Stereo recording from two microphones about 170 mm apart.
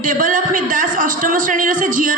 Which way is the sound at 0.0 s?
50° right (ahead or behind).